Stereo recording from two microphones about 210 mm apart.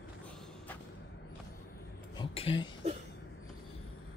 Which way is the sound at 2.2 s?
25° left (ahead or behind).